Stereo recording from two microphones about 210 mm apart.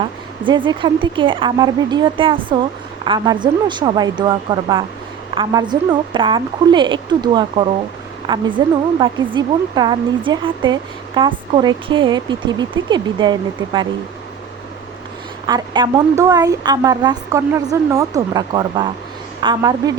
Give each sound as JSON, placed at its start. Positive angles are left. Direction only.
{"t": 0.4, "sound": "a woman's voice", "side_deg": -20}
{"t": 15.4, "sound": "a woman's voice", "side_deg": -20}